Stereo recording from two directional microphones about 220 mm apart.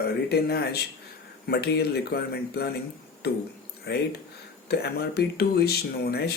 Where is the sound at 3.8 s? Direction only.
50° left (ahead or behind).